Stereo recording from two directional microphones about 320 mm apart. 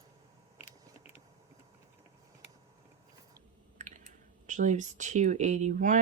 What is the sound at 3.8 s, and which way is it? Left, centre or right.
Squish, right.